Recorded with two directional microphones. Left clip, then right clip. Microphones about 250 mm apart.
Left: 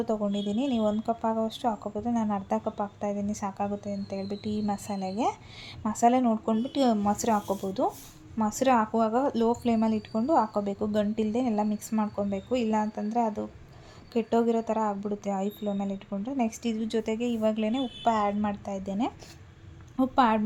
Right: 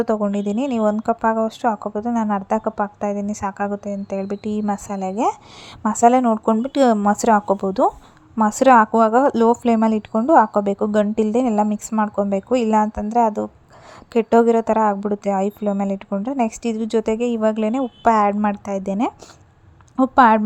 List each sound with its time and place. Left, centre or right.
0.0 s a woman's voice: right